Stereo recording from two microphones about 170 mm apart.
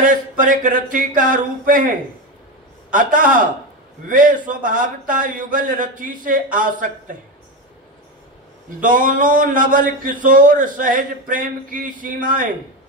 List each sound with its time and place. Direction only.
0.0 s speech: 50° right (ahead or behind)
8.8 s speech: 50° right (ahead or behind)